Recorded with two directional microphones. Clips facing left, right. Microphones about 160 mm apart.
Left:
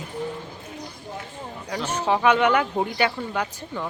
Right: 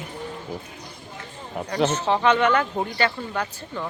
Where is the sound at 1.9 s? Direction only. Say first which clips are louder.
Left 4 dB; 10° left (ahead or behind).